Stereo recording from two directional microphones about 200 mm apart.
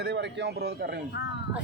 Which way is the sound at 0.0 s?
55° right (ahead or behind).